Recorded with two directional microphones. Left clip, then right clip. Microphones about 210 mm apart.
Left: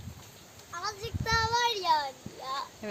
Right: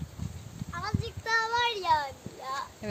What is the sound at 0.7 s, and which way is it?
Child singing, 25° left (ahead or behind).